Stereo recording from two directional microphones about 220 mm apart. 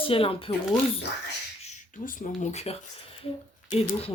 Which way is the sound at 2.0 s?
30° left (ahead or behind).